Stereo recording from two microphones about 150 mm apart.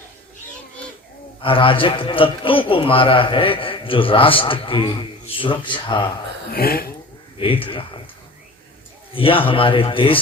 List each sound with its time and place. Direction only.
1.4 s a man's voice: 35° left (ahead or behind)
6.5 s speech: 90° left
7.3 s a man's voice: 35° left (ahead or behind)
9.1 s a man's voice: 35° left (ahead or behind)